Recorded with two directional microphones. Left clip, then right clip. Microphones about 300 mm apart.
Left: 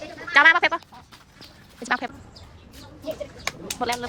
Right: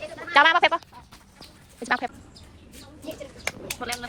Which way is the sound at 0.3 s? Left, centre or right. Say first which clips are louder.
Left 1 dB; centre.